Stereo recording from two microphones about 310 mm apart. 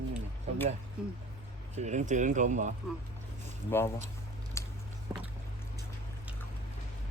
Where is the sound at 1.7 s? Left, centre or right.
Right.